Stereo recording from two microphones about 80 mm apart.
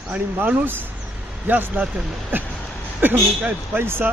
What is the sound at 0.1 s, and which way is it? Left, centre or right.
Speech, right.